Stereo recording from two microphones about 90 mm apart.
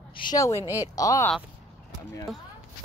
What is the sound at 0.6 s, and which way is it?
Speech, 40° left (ahead or behind).